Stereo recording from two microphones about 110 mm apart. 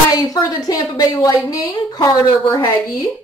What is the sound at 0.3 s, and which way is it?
Speech, 35° left (ahead or behind).